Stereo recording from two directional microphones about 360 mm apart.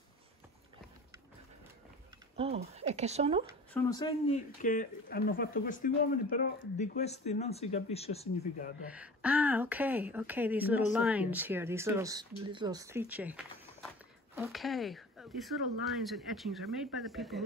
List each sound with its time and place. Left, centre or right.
2.3 s speech: centre
3.7 s speech: centre
4.6 s speech: left
8.8 s speech: centre